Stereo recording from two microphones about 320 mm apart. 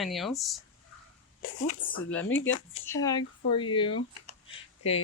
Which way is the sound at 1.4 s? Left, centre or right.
Left.